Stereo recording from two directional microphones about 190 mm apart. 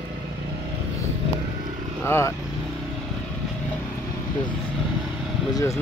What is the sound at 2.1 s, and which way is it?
Speech, 15° left (ahead or behind).